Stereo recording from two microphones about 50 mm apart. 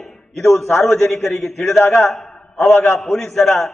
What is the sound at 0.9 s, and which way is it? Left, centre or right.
Speech, left.